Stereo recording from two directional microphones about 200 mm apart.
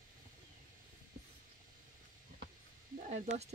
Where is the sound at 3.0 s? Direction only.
40° right (ahead or behind).